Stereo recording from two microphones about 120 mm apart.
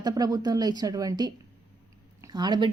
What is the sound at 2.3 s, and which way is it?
Speech, 35° right (ahead or behind).